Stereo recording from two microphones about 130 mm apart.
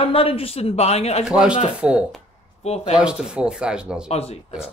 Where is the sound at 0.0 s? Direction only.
45° left (ahead or behind).